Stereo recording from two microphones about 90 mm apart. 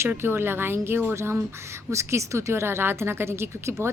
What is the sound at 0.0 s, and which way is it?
A woman's voice, 25° right (ahead or behind).